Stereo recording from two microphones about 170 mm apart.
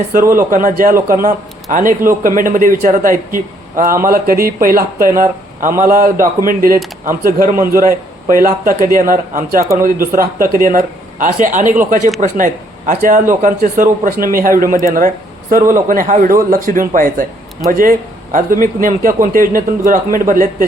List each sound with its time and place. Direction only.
0.1 s a man's voice: 55° right (ahead or behind)